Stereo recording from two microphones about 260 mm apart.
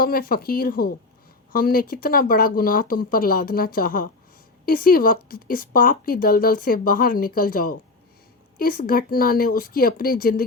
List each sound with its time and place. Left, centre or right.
0.0 s a woman's voice: left